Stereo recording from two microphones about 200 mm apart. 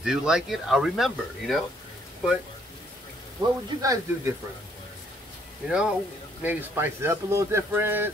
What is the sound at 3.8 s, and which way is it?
Speech, 15° right (ahead or behind).